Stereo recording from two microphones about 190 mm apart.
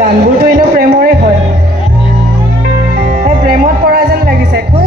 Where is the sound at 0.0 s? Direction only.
50° right (ahead or behind).